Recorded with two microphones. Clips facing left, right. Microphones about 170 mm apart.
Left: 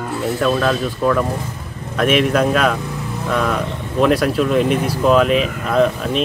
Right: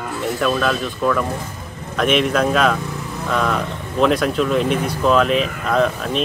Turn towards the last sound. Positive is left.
turn(degrees=5)  # may be behind; listen again after turning